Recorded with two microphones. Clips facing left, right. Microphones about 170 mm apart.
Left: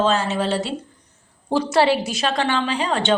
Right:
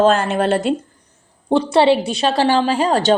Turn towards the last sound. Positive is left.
turn(degrees=-40)  # may be behind; listen again after turning